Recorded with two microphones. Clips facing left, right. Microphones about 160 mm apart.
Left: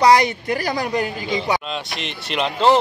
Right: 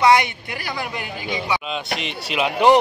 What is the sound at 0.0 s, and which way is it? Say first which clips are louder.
A woman's voice: left 2 dB; 40° left (ahead or behind).